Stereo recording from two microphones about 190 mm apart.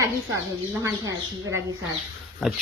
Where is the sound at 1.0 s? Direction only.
20° right (ahead or behind).